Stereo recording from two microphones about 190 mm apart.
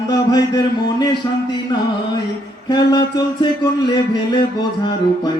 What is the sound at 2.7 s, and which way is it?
Chant, 20° left (ahead or behind).